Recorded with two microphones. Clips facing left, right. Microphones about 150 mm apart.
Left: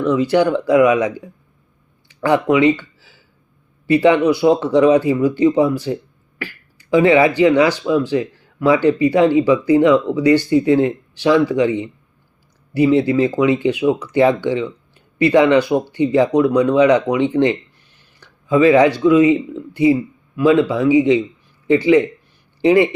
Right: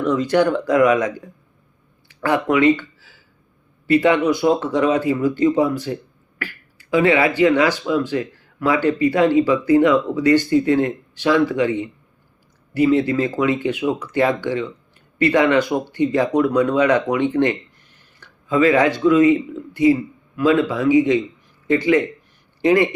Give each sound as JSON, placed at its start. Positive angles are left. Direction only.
{"t": 0.1, "sound": "speech", "side_deg": 10}
{"t": 2.2, "sound": "speech", "side_deg": 15}
{"t": 4.2, "sound": "speech", "side_deg": 15}
{"t": 7.0, "sound": "speech", "side_deg": 20}
{"t": 13.0, "sound": "speech", "side_deg": 15}
{"t": 18.2, "sound": "a sound", "side_deg": 15}
{"t": 19.0, "sound": "speech", "side_deg": 15}